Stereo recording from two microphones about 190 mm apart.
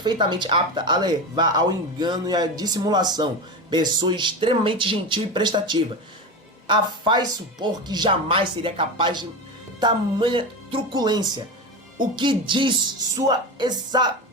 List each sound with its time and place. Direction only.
0.0 s speech: 25° right (ahead or behind)